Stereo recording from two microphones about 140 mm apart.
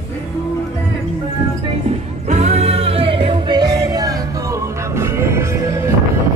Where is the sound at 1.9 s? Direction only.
55° right (ahead or behind).